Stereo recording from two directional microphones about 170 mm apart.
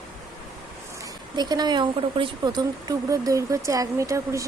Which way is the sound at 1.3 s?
25° right (ahead or behind).